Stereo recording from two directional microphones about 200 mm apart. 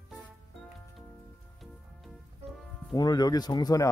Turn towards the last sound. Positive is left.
turn(degrees=20)  # may be behind; listen again after turning